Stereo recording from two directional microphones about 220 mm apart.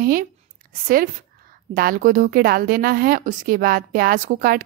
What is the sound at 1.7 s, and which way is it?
A woman's voice, 40° right (ahead or behind).